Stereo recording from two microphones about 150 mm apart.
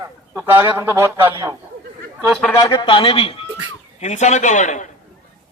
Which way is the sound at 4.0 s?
50° left (ahead or behind).